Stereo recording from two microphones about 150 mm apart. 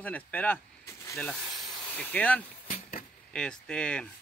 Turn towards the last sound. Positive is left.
turn(degrees=5)  # may be behind; listen again after turning